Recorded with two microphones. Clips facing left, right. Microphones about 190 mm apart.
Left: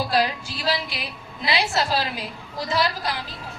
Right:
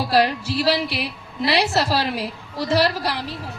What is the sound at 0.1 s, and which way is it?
A man's voice, 70° right (ahead or behind).